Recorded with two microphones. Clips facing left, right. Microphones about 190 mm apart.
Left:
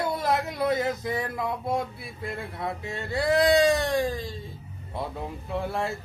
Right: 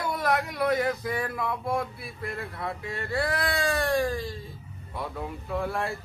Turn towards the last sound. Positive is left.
turn(degrees=25)  # may be behind; listen again after turning